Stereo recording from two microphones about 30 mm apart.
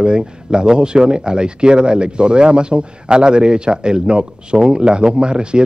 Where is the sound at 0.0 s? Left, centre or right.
Right.